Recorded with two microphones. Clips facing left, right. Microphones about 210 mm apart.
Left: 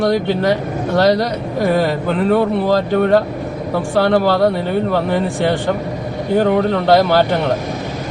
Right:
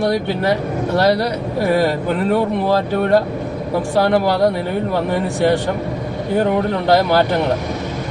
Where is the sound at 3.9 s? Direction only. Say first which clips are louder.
Left 2 dB; 10° right (ahead or behind).